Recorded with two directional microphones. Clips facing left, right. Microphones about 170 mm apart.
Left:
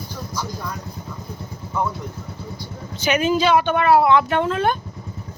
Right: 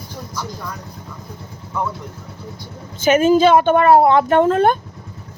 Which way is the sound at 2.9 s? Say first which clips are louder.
Right 6 dB; 45° right (ahead or behind).